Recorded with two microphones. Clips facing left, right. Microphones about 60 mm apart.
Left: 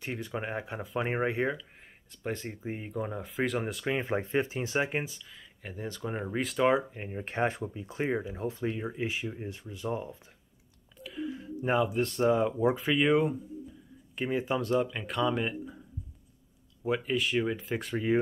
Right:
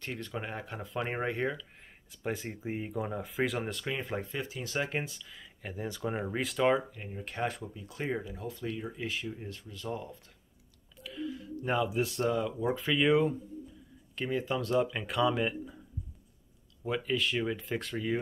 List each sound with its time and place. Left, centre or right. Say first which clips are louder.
0.0 s speech: left 3 dB; centre
2.2 s speech: even; centre
3.8 s speech: left 5 dB; left
5.0 s speech: left 1 dB; centre
6.9 s speech: left 4 dB; left
11.0 s a sound: left 2 dB; centre
11.2 s a sound: left 3 dB; left
11.7 s speech: left 2 dB; centre
12.3 s speech: left 5 dB; left
12.7 s speech: left 1 dB; centre
14.1 s speech: left 2 dB; centre
14.6 s speech: left 1 dB; centre
16.8 s speech: left 2 dB; centre
17.9 s speech: left 6 dB; left